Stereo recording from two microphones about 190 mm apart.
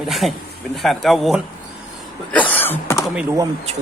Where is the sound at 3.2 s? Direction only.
15° right (ahead or behind).